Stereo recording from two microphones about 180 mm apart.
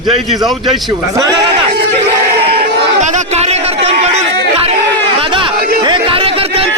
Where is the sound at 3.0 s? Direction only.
40° right (ahead or behind).